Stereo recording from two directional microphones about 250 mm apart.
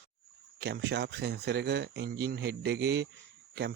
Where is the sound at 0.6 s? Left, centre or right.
Right.